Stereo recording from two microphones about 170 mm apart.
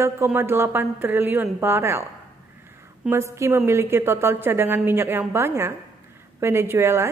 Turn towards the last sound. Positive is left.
turn(degrees=-15)  # may be behind; listen again after turning